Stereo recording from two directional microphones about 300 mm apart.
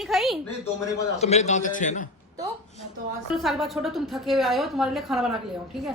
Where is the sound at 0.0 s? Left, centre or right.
Centre.